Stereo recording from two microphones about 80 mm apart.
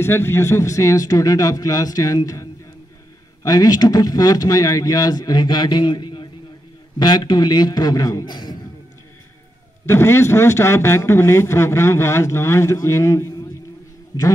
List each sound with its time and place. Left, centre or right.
0.0 s a man's voice: left
8.3 s a man's voice: left
9.8 s a man's voice: left